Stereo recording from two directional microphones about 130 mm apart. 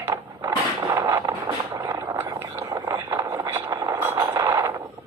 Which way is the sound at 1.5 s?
25° right (ahead or behind).